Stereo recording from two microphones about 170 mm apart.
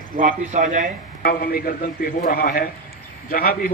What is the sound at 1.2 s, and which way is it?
A man's voice, 60° left (ahead or behind).